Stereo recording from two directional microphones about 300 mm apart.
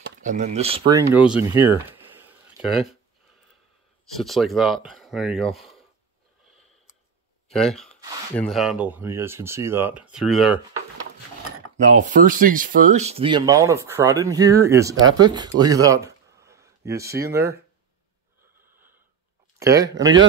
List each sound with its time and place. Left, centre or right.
0.0 s speech: right; by 1.7 s centre
2.1 s a sound: centre
4.2 s speech: centre
7.5 s speech: centre
11.9 s speech: right; by 17.3 s centre
19.6 s speech: centre